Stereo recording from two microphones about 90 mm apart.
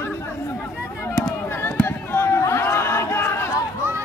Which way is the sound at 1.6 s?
25° left (ahead or behind).